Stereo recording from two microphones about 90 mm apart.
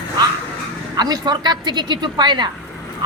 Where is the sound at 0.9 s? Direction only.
50° right (ahead or behind).